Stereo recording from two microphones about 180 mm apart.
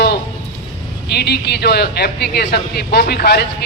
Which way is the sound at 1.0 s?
65° left (ahead or behind).